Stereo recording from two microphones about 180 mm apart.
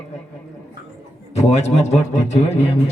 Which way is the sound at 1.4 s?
35° left (ahead or behind).